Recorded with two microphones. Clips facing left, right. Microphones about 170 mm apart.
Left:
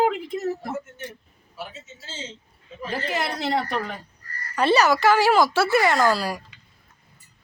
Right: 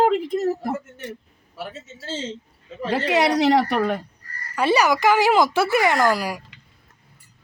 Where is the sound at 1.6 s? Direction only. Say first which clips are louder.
Right 3 dB; 65° right (ahead or behind).